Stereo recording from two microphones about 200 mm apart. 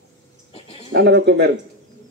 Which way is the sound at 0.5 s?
30° left (ahead or behind).